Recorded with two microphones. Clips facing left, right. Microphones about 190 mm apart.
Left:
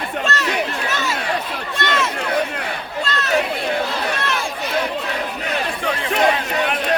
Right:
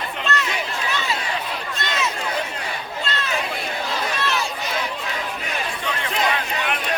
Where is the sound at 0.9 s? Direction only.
45° left (ahead or behind).